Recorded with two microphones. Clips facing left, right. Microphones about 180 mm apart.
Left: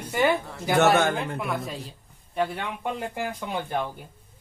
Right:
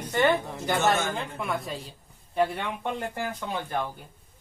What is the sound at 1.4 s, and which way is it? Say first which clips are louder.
Speech: left 1 dB; centre (ahead or behind).